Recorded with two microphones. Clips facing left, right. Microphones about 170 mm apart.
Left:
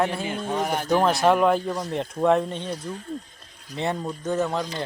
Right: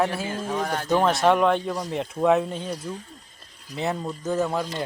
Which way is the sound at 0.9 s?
Centre (ahead or behind).